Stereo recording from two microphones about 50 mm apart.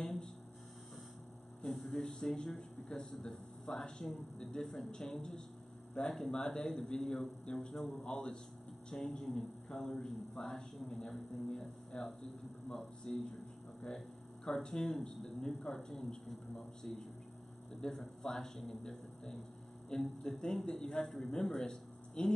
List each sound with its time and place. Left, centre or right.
0.0 s hum: centre
1.7 s a man's voice: centre
12.7 s a man's voice: centre
14.4 s a man's voice: centre
17.7 s a man's voice: centre